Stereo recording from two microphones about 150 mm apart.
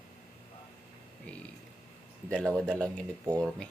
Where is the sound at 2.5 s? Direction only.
5° left (ahead or behind).